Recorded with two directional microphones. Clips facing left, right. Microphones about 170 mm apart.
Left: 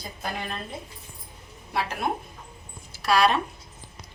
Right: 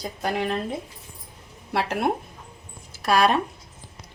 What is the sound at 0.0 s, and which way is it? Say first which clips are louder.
Speech: right 7 dB; 80° right.